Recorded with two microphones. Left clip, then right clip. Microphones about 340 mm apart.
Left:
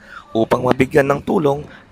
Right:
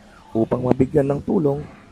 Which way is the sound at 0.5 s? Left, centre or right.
Left.